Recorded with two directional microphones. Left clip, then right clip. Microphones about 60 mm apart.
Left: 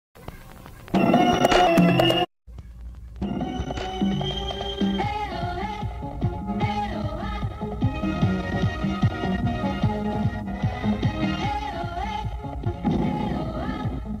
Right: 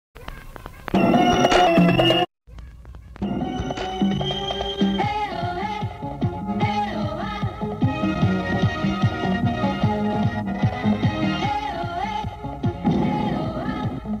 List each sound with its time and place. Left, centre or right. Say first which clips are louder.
1.0 s music: right 2 dB; centre
1.7 s music: right 2 dB; centre
2.0 s music: right 2 dB; left
3.9 s music: right 2 dB; right
4.2 s music: right 4 dB; right
4.9 s music: right 4 dB; centre